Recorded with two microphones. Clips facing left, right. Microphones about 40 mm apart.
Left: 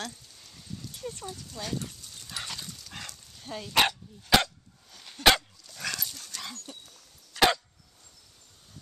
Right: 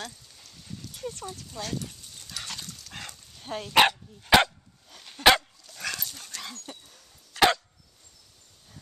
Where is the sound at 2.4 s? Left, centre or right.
Centre.